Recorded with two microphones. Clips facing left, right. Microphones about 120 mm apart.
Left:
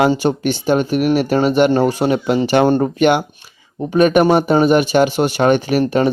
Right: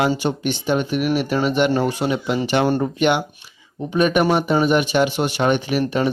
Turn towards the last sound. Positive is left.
turn(degrees=45)  # may be behind; listen again after turning